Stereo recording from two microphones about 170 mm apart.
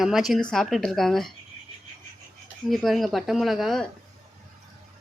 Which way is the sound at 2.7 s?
Centre (ahead or behind).